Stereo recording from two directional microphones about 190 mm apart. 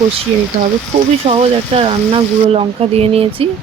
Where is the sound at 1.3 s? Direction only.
30° right (ahead or behind).